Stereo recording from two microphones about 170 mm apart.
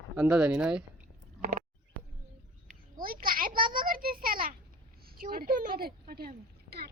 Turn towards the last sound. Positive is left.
turn(degrees=-65)  # may be behind; listen again after turning